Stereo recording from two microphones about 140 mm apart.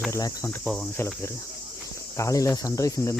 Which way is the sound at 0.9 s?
20° left (ahead or behind).